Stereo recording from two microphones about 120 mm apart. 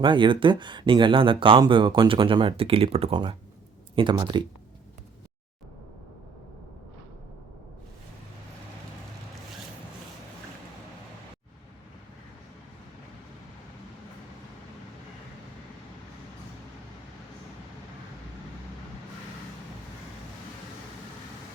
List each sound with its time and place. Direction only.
0.0 s speech: 40° right (ahead or behind)